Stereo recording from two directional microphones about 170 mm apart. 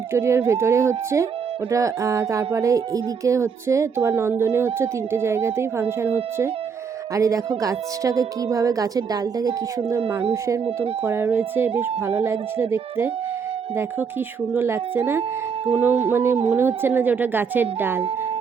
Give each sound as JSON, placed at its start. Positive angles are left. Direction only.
{"t": 0.1, "sound": "speech", "side_deg": -15}
{"t": 14.5, "sound": "speech", "side_deg": -15}